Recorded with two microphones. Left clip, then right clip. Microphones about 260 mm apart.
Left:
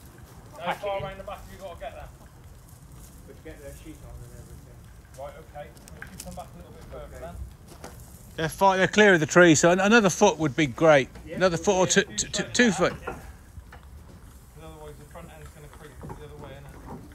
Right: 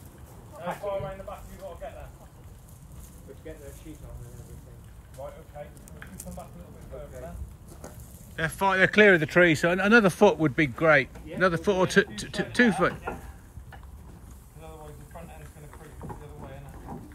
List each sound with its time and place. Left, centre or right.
0.6 s speech: centre
5.2 s a man's voice: centre
6.9 s speech: centre
8.4 s a man's voice: centre